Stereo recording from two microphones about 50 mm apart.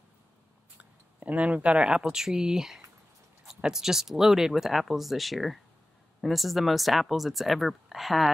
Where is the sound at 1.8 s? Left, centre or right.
Centre.